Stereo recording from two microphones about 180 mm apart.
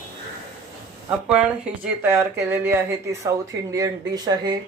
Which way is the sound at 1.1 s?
5° right (ahead or behind).